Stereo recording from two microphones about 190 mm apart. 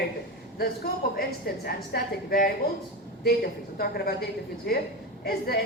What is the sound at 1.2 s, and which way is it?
A man's voice, 55° left (ahead or behind).